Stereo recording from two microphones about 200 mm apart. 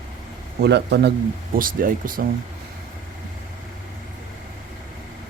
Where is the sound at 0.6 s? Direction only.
55° right (ahead or behind).